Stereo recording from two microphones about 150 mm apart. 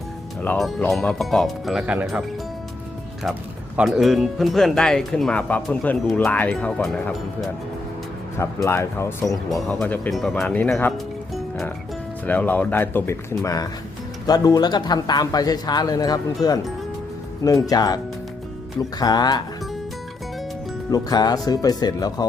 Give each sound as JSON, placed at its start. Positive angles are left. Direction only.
{"t": 0.9, "sound": "speech", "side_deg": 0}
{"t": 3.2, "sound": "speech", "side_deg": 0}
{"t": 8.4, "sound": "speech", "side_deg": 20}
{"t": 9.3, "sound": "speech", "side_deg": 0}
{"t": 12.2, "sound": "speech", "side_deg": 10}
{"t": 20.9, "sound": "speech", "side_deg": 25}